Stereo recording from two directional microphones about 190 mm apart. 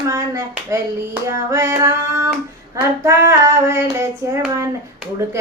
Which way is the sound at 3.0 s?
15° right (ahead or behind).